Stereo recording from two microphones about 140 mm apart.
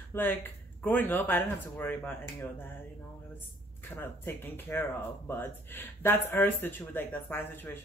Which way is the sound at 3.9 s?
15° left (ahead or behind).